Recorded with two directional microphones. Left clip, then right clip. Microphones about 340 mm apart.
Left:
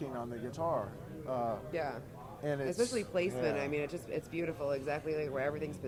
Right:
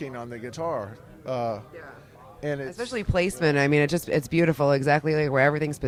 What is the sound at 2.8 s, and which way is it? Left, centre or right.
A man's voice, right.